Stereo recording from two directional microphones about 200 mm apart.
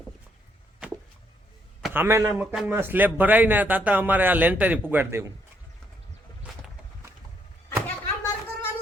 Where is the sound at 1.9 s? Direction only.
15° right (ahead or behind).